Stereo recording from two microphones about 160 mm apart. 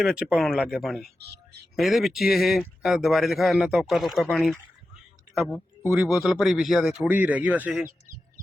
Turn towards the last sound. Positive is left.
turn(degrees=-10)  # may be behind; listen again after turning